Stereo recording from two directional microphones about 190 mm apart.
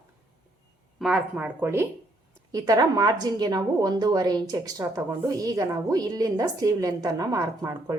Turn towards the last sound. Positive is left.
turn(degrees=-15)  # may be behind; listen again after turning